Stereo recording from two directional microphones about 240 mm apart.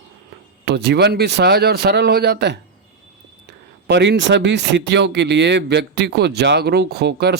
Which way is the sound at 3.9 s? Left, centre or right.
Right.